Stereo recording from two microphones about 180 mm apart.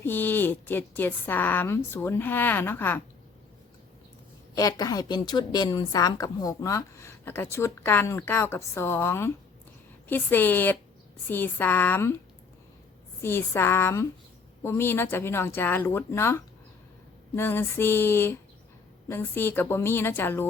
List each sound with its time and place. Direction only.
0.0 s a woman's voice: 10° left (ahead or behind)
4.5 s a woman's voice: 20° left (ahead or behind)
13.2 s a woman's voice: 15° left (ahead or behind)